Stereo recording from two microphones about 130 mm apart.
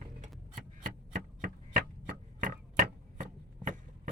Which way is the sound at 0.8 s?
90° right.